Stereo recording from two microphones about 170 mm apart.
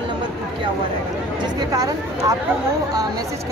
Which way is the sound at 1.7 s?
20° right (ahead or behind).